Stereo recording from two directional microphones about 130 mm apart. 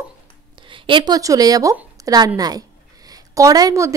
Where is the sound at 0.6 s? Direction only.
40° right (ahead or behind).